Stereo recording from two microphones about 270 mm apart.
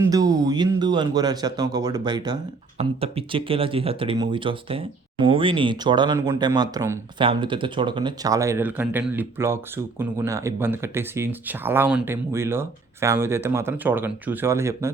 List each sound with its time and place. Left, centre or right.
0.0 s speech: centre